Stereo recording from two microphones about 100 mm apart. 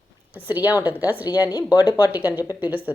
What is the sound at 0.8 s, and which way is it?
Speech, 15° right (ahead or behind).